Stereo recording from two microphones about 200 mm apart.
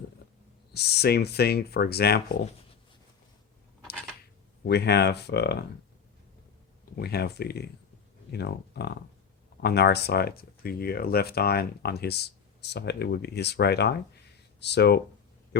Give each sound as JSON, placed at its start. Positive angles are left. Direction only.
{"t": 0.7, "sound": "speech", "side_deg": 55}
{"t": 4.6, "sound": "speech", "side_deg": 55}
{"t": 6.9, "sound": "speech", "side_deg": 55}